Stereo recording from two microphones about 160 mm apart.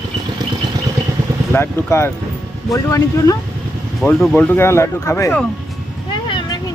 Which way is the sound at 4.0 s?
10° left (ahead or behind).